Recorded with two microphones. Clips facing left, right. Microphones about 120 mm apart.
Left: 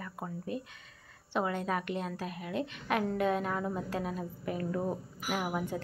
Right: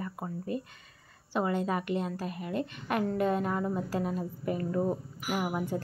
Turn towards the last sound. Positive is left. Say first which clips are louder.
# right 2 dB
turn(degrees=-5)  # may be behind; listen again after turning